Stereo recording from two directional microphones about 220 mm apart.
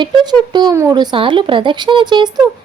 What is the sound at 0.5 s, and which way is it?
Speech, 15° right (ahead or behind).